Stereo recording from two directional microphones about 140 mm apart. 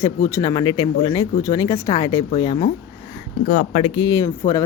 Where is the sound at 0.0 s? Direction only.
25° left (ahead or behind).